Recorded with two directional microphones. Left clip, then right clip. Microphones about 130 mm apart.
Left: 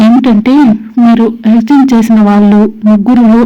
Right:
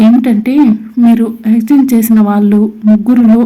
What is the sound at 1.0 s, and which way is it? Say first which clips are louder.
Speech: left 3 dB; 25° left (ahead or behind).